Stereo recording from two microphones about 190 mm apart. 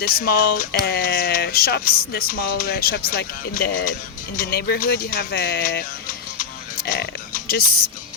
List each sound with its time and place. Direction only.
0.0 s speech: 50° left (ahead or behind)
6.4 s music: 50° left (ahead or behind)